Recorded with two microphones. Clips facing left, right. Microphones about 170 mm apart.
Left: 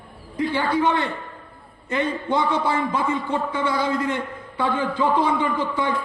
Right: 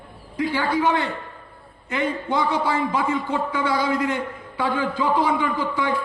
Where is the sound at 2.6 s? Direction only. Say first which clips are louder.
Even; 25° left (ahead or behind).